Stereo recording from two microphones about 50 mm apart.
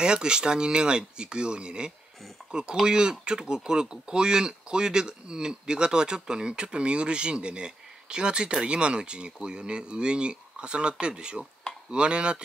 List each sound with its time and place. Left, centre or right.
0.0 s speech: centre